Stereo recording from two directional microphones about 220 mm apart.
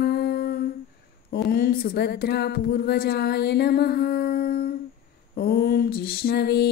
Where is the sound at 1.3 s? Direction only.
40° left (ahead or behind).